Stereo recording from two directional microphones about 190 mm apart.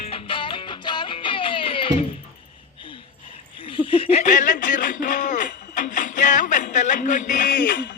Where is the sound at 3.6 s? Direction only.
25° left (ahead or behind).